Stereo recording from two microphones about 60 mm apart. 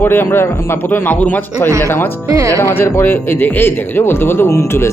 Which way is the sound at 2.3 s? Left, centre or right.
Right.